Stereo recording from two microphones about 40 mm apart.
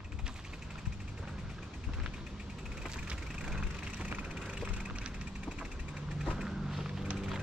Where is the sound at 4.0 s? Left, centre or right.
Right.